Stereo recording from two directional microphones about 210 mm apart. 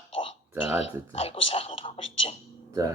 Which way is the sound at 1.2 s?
25° left (ahead or behind).